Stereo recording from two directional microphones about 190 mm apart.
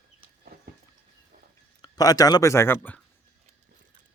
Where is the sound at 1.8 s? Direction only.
20° left (ahead or behind).